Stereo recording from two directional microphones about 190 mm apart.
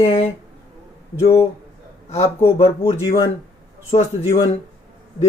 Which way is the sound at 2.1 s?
30° left (ahead or behind).